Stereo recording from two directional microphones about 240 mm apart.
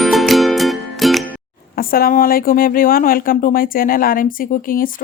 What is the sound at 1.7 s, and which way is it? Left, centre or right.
Speech, left.